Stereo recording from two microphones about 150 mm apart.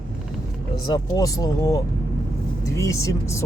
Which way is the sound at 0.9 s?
25° left (ahead or behind).